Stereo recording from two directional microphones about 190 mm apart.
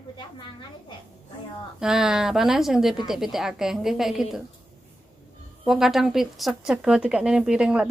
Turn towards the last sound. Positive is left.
turn(degrees=-5)  # may be behind; listen again after turning